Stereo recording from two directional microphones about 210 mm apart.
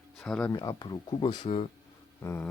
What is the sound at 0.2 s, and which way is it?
Speech, 5° left (ahead or behind).